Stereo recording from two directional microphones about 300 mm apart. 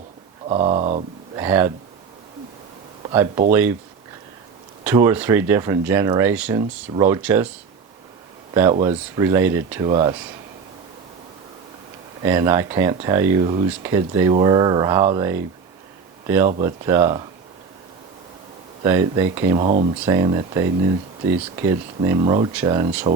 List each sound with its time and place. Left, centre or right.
0.4 s speech: centre
1.5 s speech: centre
3.0 s speech: centre
3.5 s speech: centre
4.8 s speech: centre
8.5 s speech: centre
12.2 s speech: centre
18.8 s speech: centre
19.6 s speech: right